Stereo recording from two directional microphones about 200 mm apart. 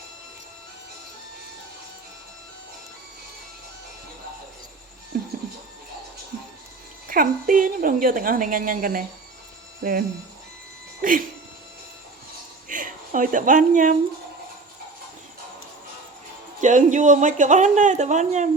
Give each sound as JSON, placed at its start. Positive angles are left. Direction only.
{"t": 5.1, "sound": "music", "side_deg": -50}
{"t": 7.1, "sound": "a woman's voice", "side_deg": -45}
{"t": 11.0, "sound": "speech", "side_deg": -45}
{"t": 12.6, "sound": "a sound", "side_deg": -40}
{"t": 16.6, "sound": "speech", "side_deg": -40}